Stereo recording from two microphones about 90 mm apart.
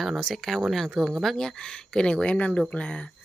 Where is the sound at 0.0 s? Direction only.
Centre (ahead or behind).